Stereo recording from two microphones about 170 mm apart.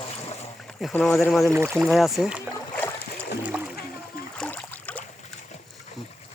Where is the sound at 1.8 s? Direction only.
Centre (ahead or behind).